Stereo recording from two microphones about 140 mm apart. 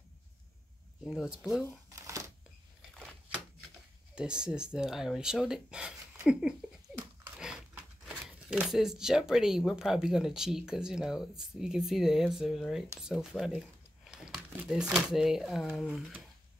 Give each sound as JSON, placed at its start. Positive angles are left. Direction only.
{"t": 1.0, "sound": "speech", "side_deg": -5}
{"t": 2.0, "sound": "a sound", "side_deg": -20}
{"t": 4.1, "sound": "speech", "side_deg": -5}